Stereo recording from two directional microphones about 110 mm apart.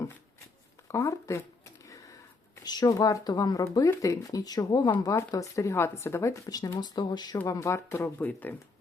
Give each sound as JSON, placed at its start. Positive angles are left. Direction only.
{"t": 0.9, "sound": "speech", "side_deg": 25}
{"t": 1.8, "sound": "a sound", "side_deg": 30}
{"t": 2.6, "sound": "speech", "side_deg": 35}
{"t": 7.4, "sound": "speech", "side_deg": 30}